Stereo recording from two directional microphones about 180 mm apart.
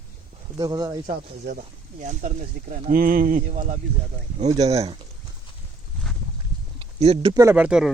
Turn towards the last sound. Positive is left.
turn(degrees=-5)  # may be behind; listen again after turning